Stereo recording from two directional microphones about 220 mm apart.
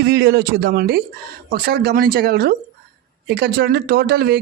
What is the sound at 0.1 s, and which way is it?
Speech, 50° right (ahead or behind).